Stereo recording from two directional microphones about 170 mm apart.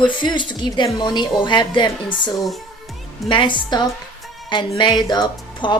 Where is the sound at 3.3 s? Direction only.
30° left (ahead or behind).